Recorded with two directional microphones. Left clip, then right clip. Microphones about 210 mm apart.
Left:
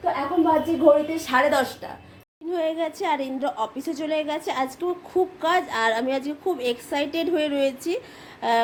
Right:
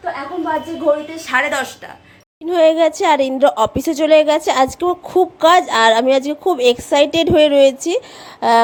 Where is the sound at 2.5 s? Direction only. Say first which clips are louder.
Right 13 dB; 40° right (ahead or behind).